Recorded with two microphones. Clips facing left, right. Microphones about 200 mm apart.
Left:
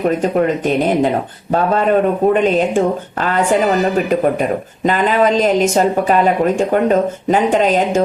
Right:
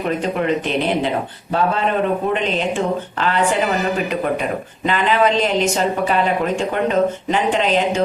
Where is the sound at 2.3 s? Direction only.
45° left (ahead or behind).